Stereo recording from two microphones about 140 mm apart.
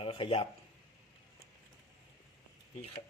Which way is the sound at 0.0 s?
40° left (ahead or behind).